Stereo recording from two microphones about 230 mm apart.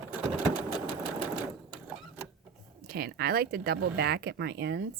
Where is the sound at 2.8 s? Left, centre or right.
Right.